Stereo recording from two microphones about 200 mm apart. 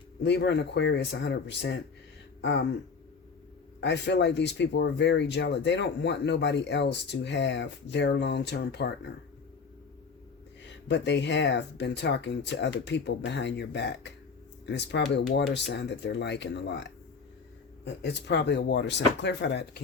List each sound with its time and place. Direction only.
0.2 s speech: 60° left (ahead or behind)
2.4 s a sound: 65° left (ahead or behind)
3.8 s speech: 60° left (ahead or behind)
10.8 s speech: 60° left (ahead or behind)
18.0 s speech: 60° left (ahead or behind)